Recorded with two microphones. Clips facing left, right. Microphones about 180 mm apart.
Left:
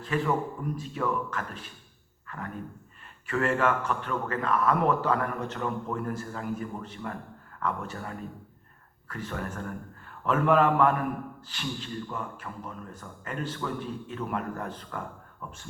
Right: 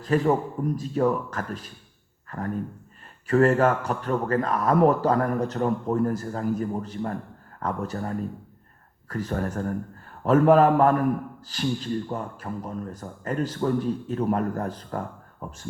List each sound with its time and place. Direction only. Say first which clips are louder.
0.0 s a man's voice: right 6 dB; 40° right (ahead or behind)